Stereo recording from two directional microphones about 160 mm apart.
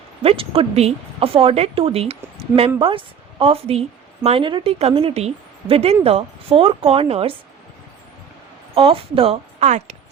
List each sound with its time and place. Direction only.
0.2 s a woman's voice: 35° right (ahead or behind)
8.7 s a woman's voice: 35° right (ahead or behind)